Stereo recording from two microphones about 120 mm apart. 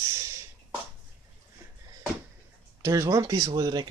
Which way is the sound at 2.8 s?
25° right (ahead or behind).